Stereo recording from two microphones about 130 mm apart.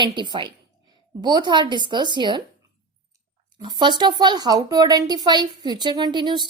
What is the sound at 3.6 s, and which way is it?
A woman's voice, 35° right (ahead or behind).